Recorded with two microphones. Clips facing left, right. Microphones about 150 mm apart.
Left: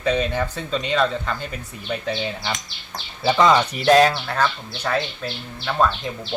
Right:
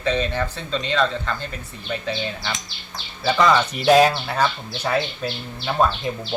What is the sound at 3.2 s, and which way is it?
Speech, 20° left (ahead or behind).